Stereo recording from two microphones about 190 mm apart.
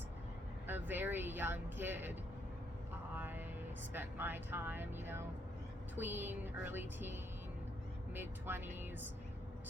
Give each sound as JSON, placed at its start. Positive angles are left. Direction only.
{"t": 0.7, "sound": "speech", "side_deg": -10}
{"t": 3.2, "sound": "speech", "side_deg": -10}